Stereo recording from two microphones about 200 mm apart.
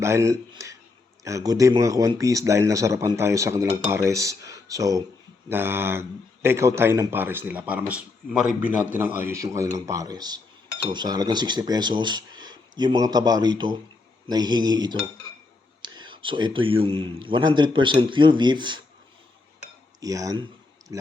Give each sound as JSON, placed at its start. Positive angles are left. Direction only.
{"t": 0.0, "sound": "a sound", "side_deg": -15}
{"t": 1.2, "sound": "a man's voice", "side_deg": -15}
{"t": 20.0, "sound": "speech", "side_deg": -15}